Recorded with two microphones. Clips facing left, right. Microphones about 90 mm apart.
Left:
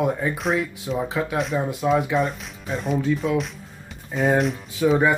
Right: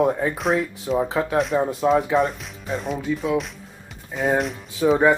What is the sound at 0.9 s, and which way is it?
Speech, 35° right (ahead or behind).